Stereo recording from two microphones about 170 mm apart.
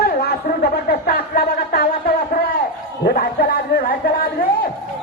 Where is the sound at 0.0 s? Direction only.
65° left (ahead or behind).